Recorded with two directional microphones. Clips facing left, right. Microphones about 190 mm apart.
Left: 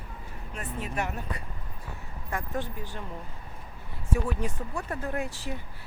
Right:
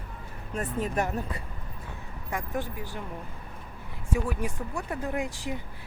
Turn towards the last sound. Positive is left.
turn(degrees=-15)  # may be behind; listen again after turning